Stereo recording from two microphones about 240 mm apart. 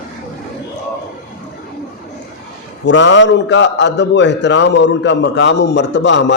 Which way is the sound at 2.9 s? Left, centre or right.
Left.